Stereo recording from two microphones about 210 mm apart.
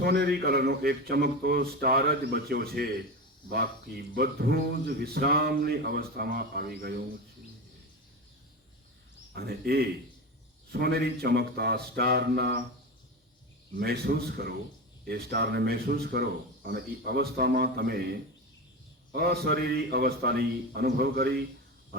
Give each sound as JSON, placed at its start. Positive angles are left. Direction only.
{"t": 0.0, "sound": "speech", "side_deg": -50}
{"t": 9.3, "sound": "speech", "side_deg": -50}
{"t": 13.7, "sound": "speech", "side_deg": -50}